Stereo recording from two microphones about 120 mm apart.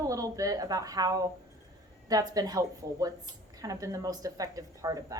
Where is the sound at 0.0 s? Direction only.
30° right (ahead or behind).